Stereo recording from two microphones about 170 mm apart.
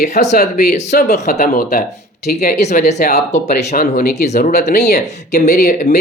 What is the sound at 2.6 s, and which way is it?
Speech, 40° left (ahead or behind).